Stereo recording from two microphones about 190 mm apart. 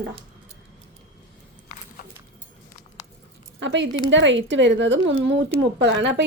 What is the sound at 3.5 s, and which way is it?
A woman's voice, 70° right (ahead or behind).